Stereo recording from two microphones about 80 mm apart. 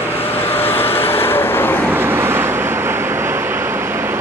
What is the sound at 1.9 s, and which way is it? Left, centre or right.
Vehicle, right.